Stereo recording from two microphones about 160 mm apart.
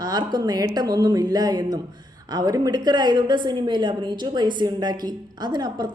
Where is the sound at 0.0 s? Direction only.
25° right (ahead or behind).